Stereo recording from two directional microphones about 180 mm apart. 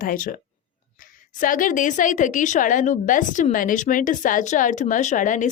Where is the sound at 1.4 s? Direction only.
50° left (ahead or behind).